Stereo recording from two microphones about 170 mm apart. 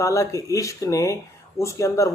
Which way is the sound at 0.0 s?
20° left (ahead or behind).